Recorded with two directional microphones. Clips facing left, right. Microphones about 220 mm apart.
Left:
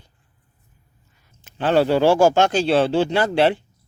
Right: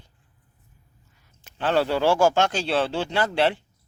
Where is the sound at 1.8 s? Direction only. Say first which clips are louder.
Left 5 dB; 20° left (ahead or behind).